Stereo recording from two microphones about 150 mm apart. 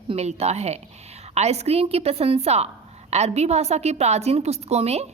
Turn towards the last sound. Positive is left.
turn(degrees=-45)  # may be behind; listen again after turning